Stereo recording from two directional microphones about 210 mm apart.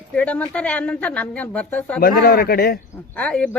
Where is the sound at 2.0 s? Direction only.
45° left (ahead or behind).